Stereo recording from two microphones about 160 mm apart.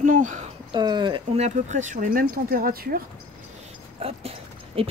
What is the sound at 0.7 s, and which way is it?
Speech, 30° right (ahead or behind).